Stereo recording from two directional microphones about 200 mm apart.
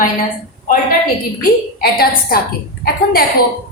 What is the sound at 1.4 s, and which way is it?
A woman's voice, 50° left (ahead or behind).